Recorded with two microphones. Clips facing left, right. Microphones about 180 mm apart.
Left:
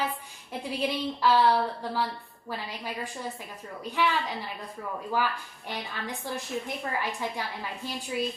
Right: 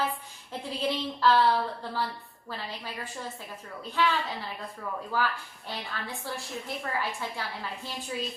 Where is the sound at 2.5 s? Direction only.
15° left (ahead or behind).